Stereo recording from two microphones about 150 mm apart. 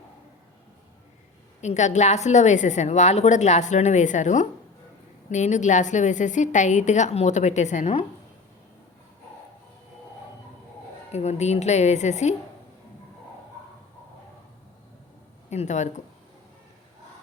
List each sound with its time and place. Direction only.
1.6 s a woman's voice: 50° left (ahead or behind)
11.1 s a woman's voice: 45° left (ahead or behind)
15.4 s a woman's voice: 50° left (ahead or behind)